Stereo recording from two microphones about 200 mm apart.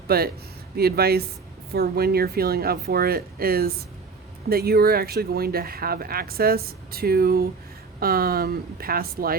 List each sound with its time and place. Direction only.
0.1 s speech: 50° right (ahead or behind)